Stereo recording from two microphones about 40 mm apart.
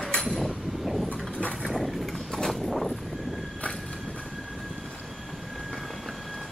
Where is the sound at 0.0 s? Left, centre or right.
Left.